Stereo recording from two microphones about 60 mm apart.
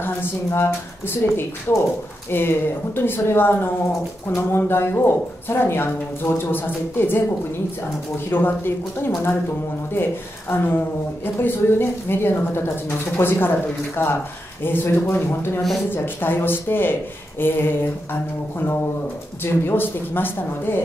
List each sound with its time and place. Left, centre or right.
0.0 s speech: left
8.3 s speech: left
10.5 s speech: left
19.4 s speech: left